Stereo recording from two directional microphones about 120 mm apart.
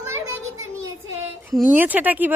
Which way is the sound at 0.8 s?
25° right (ahead or behind).